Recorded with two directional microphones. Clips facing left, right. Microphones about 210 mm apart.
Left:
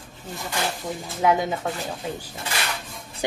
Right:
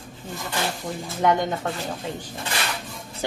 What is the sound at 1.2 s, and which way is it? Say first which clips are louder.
Speech: even; 5° left (ahead or behind).